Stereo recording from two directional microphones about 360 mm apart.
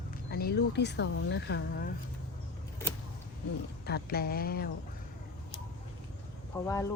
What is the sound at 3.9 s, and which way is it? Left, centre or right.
Speech, left.